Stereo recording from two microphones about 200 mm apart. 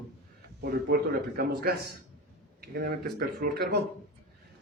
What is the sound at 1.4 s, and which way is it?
Speech, 50° right (ahead or behind).